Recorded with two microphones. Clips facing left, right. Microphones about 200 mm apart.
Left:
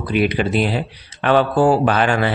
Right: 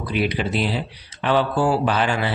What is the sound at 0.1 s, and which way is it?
Speech, 55° left (ahead or behind).